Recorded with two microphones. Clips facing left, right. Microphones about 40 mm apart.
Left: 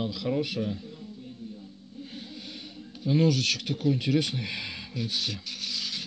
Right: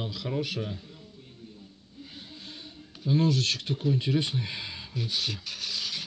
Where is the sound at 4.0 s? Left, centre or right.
Centre.